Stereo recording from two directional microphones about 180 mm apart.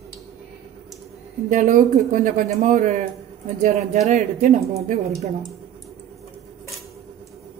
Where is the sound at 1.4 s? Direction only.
45° right (ahead or behind).